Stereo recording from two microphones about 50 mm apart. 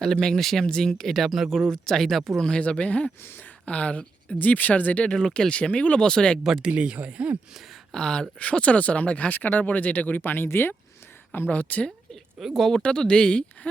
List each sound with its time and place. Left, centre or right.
0.0 s speech: centre
2.4 s speech: centre
5.0 s speech: centre
6.0 s speech: centre
6.4 s speech: centre
6.7 s speech: right
7.9 s speech: centre; by 10.8 s left
11.3 s speech: left
12.4 s speech: centre
12.8 s speech: centre